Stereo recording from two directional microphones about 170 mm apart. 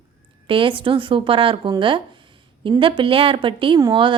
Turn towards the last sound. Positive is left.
turn(degrees=-30)  # may be behind; listen again after turning